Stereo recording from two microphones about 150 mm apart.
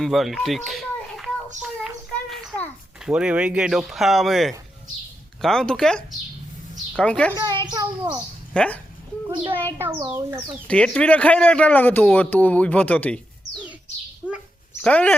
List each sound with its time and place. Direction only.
0.0 s a child's voice: centre (ahead or behind)
1.6 s a sound: centre (ahead or behind)
5.4 s a man's voice: 5° left (ahead or behind)
7.3 s a child's voice: 30° right (ahead or behind)
8.5 s a man's voice: 10° left (ahead or behind)
9.3 s a woman's voice: 35° right (ahead or behind)
10.7 s a man's voice: 5° left (ahead or behind)
14.3 s bird: 5° right (ahead or behind)
14.8 s a man's voice: 10° left (ahead or behind)